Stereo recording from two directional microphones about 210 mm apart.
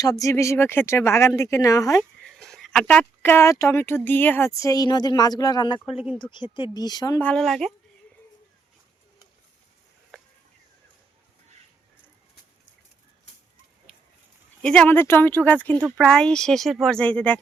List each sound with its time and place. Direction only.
0.0 s speech: 15° left (ahead or behind)
2.2 s speech: centre (ahead or behind); by 7.3 s 15° left (ahead or behind)
7.3 s speech: centre (ahead or behind)
14.6 s speech: 5° left (ahead or behind)